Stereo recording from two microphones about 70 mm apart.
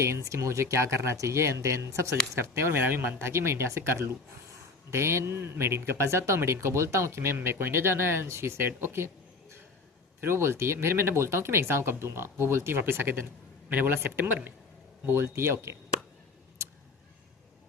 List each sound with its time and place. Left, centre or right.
0.0 s speech: right
10.2 s speech: right